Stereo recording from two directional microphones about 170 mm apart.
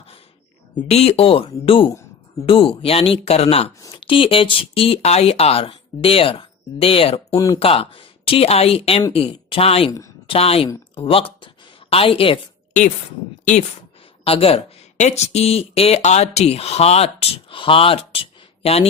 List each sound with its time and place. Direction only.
0.9 s speech: 35° left (ahead or behind)
3.8 s speech: 25° left (ahead or behind)
7.3 s speech: 20° left (ahead or behind)
7.6 s speech: 35° left (ahead or behind)
14.3 s speech: 35° left (ahead or behind)